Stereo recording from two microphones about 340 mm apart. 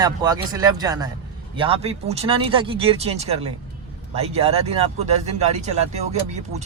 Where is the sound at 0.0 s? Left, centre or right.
Centre.